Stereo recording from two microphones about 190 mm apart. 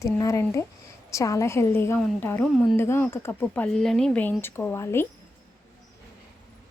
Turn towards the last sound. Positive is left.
turn(degrees=15)  # may be behind; listen again after turning